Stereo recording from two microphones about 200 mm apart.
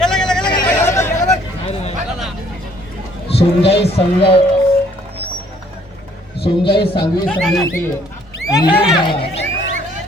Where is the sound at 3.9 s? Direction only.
30° left (ahead or behind).